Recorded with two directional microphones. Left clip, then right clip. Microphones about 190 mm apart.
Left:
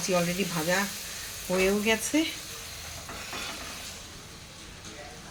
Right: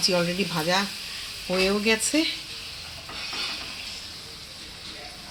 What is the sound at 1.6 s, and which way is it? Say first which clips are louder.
Speech: right 3 dB; 40° right (ahead or behind).